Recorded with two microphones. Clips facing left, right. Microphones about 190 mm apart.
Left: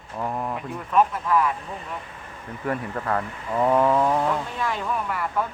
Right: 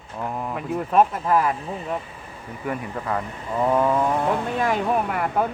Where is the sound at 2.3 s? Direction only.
5° right (ahead or behind).